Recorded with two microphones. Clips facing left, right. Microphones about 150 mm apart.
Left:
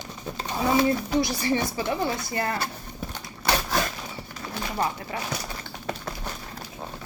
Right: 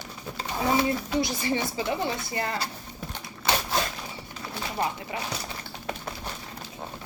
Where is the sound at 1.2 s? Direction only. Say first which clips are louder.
Left 2 dB; 20° right (ahead or behind).